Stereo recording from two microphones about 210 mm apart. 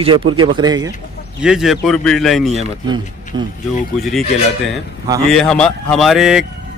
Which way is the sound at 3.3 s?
25° right (ahead or behind).